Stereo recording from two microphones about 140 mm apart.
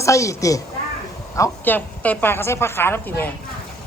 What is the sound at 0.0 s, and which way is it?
Speech, 20° left (ahead or behind).